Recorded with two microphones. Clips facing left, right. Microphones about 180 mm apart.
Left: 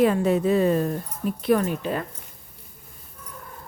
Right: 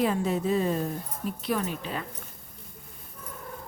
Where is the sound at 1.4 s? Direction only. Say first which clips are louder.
Left 9 dB; 55° left (ahead or behind).